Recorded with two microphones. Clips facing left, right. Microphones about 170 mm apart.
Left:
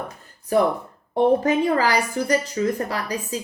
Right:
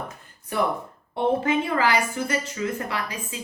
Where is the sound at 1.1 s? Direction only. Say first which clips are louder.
Left 4 dB; 40° left (ahead or behind).